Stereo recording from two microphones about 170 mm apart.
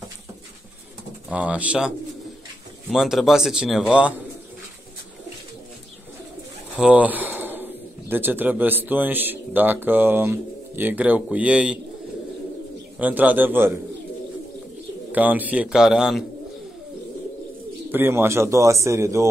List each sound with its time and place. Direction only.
1.3 s speech: 10° right (ahead or behind)
6.8 s speech: 5° right (ahead or behind)
13.0 s speech: 10° right (ahead or behind)
15.1 s speech: 10° right (ahead or behind)
17.9 s speech: 15° right (ahead or behind)